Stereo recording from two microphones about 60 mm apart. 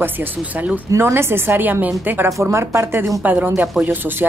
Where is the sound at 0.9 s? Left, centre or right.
Right.